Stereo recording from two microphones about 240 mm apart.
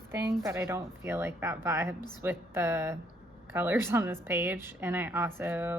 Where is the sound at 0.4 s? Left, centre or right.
Centre.